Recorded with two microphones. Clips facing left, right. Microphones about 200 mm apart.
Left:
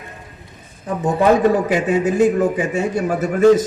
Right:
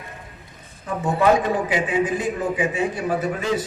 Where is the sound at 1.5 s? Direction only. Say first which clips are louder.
Left 4 dB; 40° left (ahead or behind).